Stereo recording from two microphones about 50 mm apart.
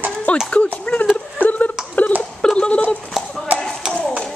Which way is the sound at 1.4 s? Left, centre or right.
Left.